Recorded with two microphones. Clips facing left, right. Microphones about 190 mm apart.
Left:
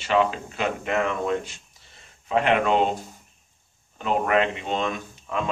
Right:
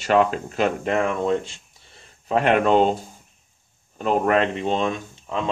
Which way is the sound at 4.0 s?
40° right (ahead or behind).